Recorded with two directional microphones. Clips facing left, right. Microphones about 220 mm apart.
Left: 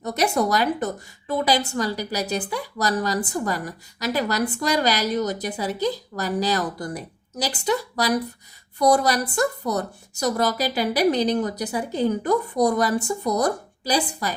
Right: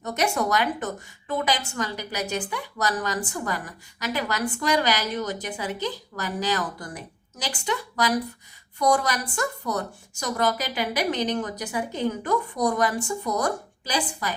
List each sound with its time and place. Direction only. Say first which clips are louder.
0.0 s a woman's voice: left 3 dB; 35° left (ahead or behind)